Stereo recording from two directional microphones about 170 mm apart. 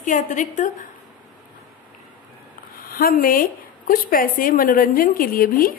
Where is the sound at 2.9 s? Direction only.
60° left (ahead or behind).